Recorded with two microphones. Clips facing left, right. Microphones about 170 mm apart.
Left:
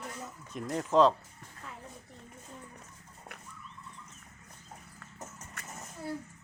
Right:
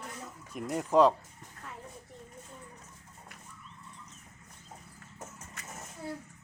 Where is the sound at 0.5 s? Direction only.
10° right (ahead or behind).